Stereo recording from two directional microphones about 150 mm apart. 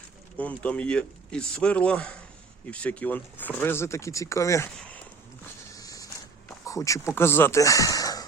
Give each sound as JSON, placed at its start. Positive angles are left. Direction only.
{"t": 0.3, "sound": "speech", "side_deg": 10}
{"t": 5.7, "sound": "a sound", "side_deg": 25}
{"t": 6.7, "sound": "speech", "side_deg": 20}